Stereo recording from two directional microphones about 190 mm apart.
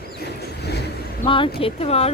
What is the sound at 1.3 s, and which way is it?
Speech, 25° left (ahead or behind).